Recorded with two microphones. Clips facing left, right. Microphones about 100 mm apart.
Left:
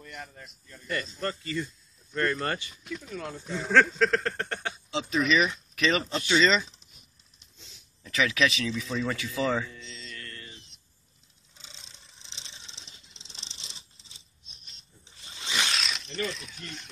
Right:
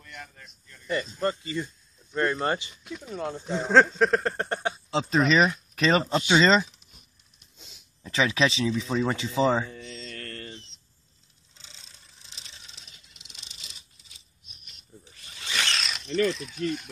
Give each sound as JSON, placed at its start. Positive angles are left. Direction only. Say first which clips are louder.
{"t": 0.8, "sound": "speech", "louder": "right 5 dB", "side_deg": -20}
{"t": 4.9, "sound": "speech", "louder": "right 3 dB", "side_deg": -35}
{"t": 7.5, "sound": "a sound", "louder": "right 2 dB", "side_deg": -15}
{"t": 8.0, "sound": "speech", "louder": "right 2 dB", "side_deg": -30}
{"t": 9.8, "sound": "mantra", "louder": "right 4 dB", "side_deg": -65}
{"t": 11.5, "sound": "vehicle", "louder": "left 1 dB", "side_deg": 20}
{"t": 15.2, "sound": "a sound", "louder": "even", "side_deg": 20}
{"t": 15.7, "sound": "speech", "louder": "right 5 dB", "side_deg": 0}